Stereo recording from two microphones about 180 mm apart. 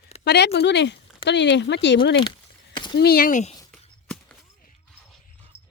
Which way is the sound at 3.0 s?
55° left (ahead or behind).